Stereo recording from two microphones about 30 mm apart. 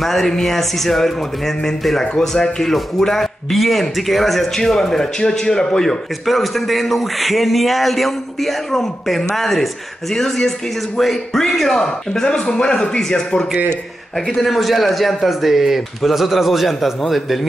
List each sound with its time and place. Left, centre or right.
0.0 s speech: centre
3.1 s a man's voice: centre
4.6 s speech: centre
6.2 s a man's voice: centre
11.8 s speech: left
14.3 s a man's voice: centre
15.1 s a man's voice: centre